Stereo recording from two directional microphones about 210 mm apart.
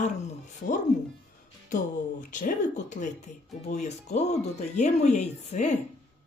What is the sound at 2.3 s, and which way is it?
A woman's voice, 35° left (ahead or behind).